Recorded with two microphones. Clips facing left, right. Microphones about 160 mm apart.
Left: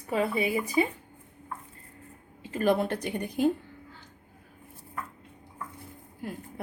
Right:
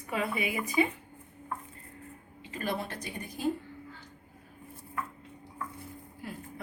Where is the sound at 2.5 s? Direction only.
50° left (ahead or behind).